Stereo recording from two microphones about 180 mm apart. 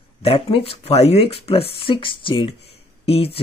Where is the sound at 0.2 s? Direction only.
30° left (ahead or behind).